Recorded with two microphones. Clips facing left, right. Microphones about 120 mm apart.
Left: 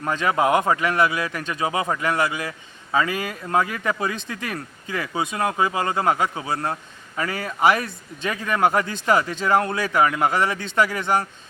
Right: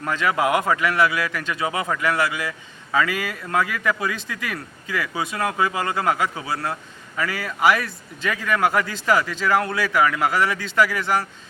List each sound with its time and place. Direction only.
0.0 s a man's voice: 25° left (ahead or behind)